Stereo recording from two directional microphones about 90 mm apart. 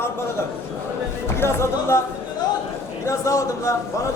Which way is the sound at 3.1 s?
35° left (ahead or behind).